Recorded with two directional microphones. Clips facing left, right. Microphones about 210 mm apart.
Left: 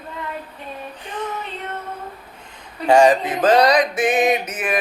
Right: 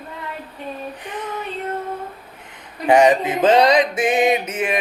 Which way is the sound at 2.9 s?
20° right (ahead or behind).